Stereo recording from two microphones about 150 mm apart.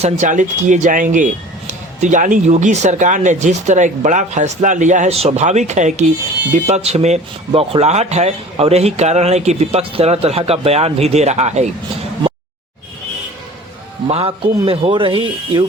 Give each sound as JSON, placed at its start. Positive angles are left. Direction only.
{"t": 0.0, "sound": "speech", "side_deg": -55}
{"t": 14.1, "sound": "speech", "side_deg": -40}